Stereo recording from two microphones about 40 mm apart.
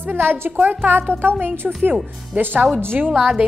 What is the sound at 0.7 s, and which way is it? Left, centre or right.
Speech, right.